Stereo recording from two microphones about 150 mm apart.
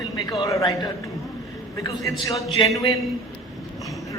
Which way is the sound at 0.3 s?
25° left (ahead or behind).